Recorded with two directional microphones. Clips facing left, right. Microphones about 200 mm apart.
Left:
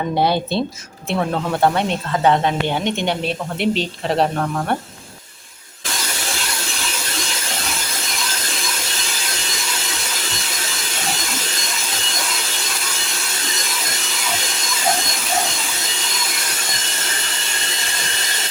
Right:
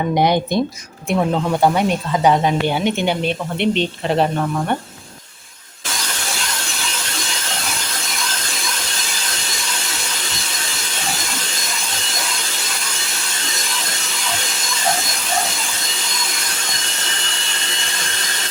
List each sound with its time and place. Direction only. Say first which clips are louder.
0.1 s speech: right 2 dB; 15° right (ahead or behind); by 4.8 s centre (ahead or behind)